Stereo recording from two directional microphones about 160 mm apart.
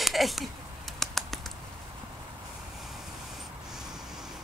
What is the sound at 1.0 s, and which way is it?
Typing, centre (ahead or behind).